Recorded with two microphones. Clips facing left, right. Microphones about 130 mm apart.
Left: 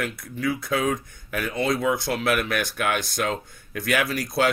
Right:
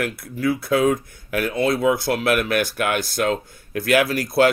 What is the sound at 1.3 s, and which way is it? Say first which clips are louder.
Speech: right 4 dB; 60° right (ahead or behind).